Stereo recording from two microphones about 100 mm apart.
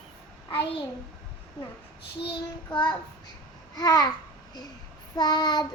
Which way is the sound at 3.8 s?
40° left (ahead or behind).